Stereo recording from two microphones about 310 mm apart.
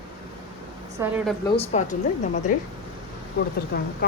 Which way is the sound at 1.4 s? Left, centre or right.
Centre.